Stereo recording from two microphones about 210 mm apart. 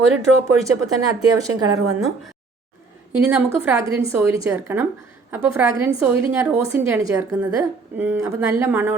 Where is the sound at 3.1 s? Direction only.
5° right (ahead or behind).